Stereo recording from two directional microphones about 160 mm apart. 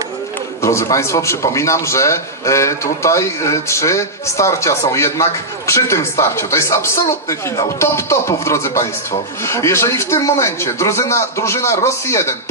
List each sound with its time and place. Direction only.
0.6 s a man's voice: 20° left (ahead or behind)